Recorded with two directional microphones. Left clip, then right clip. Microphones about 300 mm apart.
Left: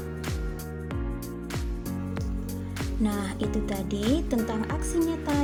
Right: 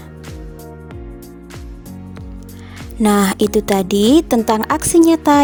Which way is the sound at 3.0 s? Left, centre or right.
Right.